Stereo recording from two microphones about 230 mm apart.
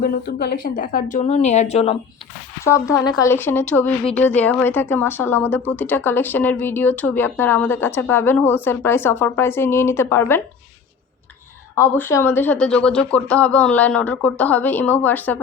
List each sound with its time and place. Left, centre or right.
0.0 s a woman's voice: left
2.6 s speech: centre
11.8 s speech: centre